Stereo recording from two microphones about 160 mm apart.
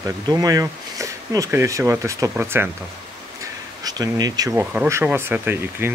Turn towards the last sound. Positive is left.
turn(degrees=-15)  # may be behind; listen again after turning